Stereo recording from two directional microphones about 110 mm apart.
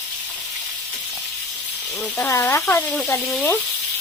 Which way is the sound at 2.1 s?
25° left (ahead or behind).